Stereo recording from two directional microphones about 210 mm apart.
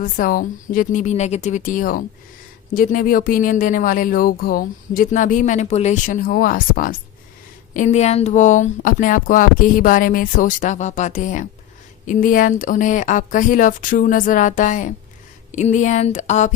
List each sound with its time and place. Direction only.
0.0 s speech: 40° left (ahead or behind)